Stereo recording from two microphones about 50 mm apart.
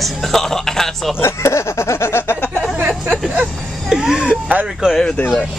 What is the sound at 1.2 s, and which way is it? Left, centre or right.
Speech, left.